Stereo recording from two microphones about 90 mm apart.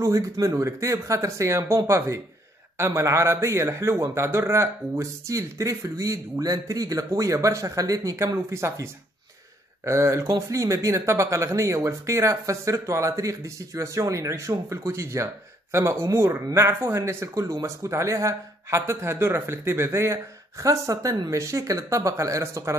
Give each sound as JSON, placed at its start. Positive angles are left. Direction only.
{"t": 0.0, "sound": "speech", "side_deg": -35}